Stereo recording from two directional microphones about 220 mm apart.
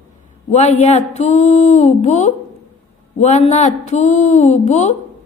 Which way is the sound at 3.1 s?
30° left (ahead or behind).